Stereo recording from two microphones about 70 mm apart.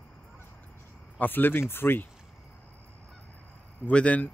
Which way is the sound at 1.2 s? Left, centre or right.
Left.